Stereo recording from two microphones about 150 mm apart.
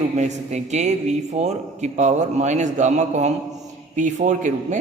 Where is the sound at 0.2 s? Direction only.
50° right (ahead or behind).